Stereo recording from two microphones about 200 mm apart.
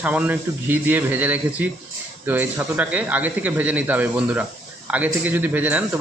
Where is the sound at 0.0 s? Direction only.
5° right (ahead or behind).